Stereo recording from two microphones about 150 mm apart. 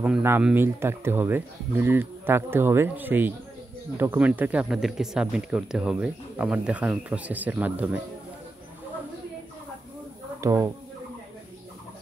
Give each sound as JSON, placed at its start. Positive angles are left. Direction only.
{"t": 0.0, "sound": "speech", "side_deg": -10}
{"t": 10.4, "sound": "speech", "side_deg": -20}